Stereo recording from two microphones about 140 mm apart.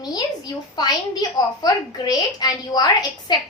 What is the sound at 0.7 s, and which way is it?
A woman's voice, 30° left (ahead or behind).